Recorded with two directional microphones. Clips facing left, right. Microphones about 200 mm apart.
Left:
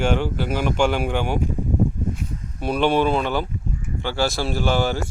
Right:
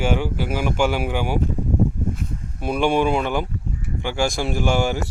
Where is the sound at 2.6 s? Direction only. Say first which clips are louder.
Even; 10° right (ahead or behind).